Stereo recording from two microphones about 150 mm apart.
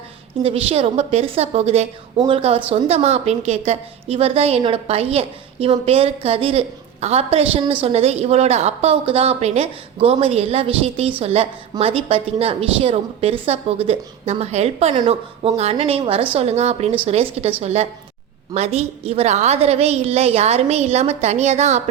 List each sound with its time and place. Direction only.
0.4 s a woman's voice: 40° right (ahead or behind)